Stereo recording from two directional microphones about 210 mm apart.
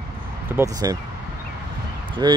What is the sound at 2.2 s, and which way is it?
Speech, 20° right (ahead or behind).